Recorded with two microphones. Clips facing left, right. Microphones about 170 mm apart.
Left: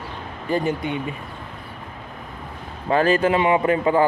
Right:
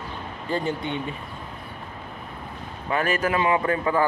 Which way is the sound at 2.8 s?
30° left (ahead or behind).